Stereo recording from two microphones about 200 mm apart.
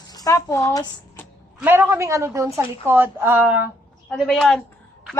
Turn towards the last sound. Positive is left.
turn(degrees=0)  # may be behind; listen again after turning